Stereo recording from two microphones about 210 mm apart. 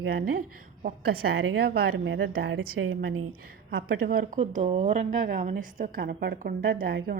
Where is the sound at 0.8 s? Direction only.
45° right (ahead or behind).